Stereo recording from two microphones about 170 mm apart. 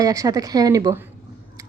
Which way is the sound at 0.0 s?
20° right (ahead or behind).